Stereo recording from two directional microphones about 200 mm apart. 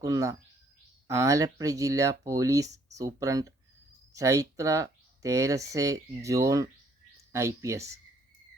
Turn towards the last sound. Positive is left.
turn(degrees=-15)  # may be behind; listen again after turning